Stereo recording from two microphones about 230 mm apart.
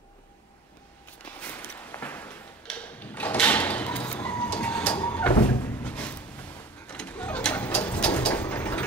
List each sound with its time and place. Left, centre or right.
1.4 s drawer open or close: centre
6.9 s bird: centre